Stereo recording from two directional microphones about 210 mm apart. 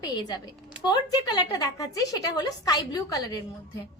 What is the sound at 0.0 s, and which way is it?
A woman's voice, 20° left (ahead or behind).